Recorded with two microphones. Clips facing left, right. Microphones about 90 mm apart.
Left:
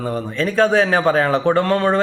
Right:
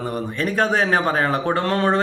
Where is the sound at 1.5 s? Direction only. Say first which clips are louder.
Left 3 dB; 20° right (ahead or behind).